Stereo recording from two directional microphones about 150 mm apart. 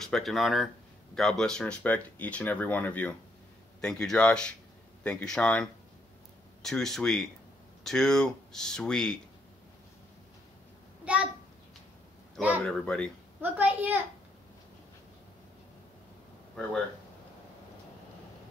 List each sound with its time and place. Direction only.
0.0 s speech: centre (ahead or behind)
12.4 s a woman's voice: 10° right (ahead or behind)
12.6 s speech: 5° left (ahead or behind)
13.4 s a woman's voice: 10° right (ahead or behind)